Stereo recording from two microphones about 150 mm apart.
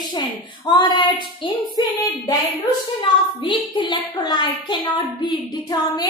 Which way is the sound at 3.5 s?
30° left (ahead or behind).